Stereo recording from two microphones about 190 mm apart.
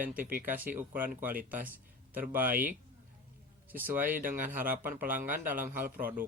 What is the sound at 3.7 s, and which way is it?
Speech, 10° right (ahead or behind).